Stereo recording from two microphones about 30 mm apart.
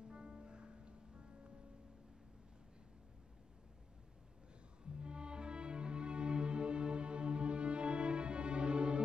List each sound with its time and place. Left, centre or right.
0.1 s music: right
4.8 s music: right